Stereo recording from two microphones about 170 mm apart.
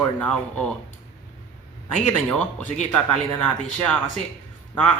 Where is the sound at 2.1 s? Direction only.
5° left (ahead or behind).